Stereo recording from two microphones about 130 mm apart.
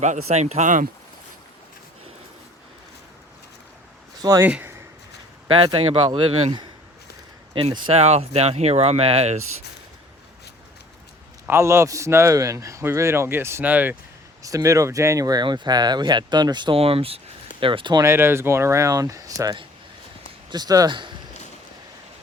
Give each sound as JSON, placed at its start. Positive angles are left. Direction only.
{"t": 0.0, "sound": "speech", "side_deg": -60}
{"t": 4.2, "sound": "speech", "side_deg": -25}
{"t": 4.4, "sound": "speech", "side_deg": -10}
{"t": 5.5, "sound": "speech", "side_deg": -40}
{"t": 11.4, "sound": "a man's voice", "side_deg": -20}
{"t": 14.4, "sound": "speech", "side_deg": -25}
{"t": 16.7, "sound": "speech", "side_deg": -45}
{"t": 18.0, "sound": "a man's voice", "side_deg": -20}